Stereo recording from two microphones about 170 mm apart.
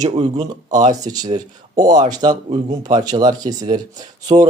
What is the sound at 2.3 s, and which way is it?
Speech, 40° right (ahead or behind).